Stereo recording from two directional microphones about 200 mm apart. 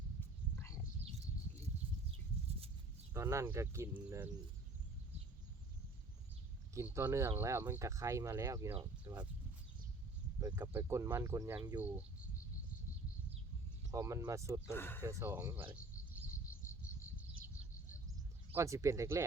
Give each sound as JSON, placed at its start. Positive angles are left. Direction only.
{"t": 0.2, "sound": "a sound", "side_deg": 15}
{"t": 3.1, "sound": "speech", "side_deg": -15}
{"t": 6.7, "sound": "speech", "side_deg": -15}
{"t": 10.4, "sound": "speech", "side_deg": -15}
{"t": 13.9, "sound": "speech", "side_deg": -15}
{"t": 14.7, "sound": "speech", "side_deg": 10}
{"t": 15.0, "sound": "speech", "side_deg": -10}
{"t": 16.6, "sound": "cricket", "side_deg": 15}
{"t": 18.5, "sound": "speech", "side_deg": -15}